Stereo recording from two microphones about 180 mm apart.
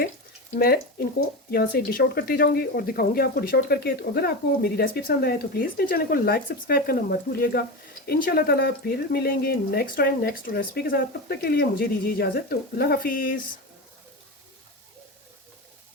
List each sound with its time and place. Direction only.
0.6 s speech: 55° left (ahead or behind)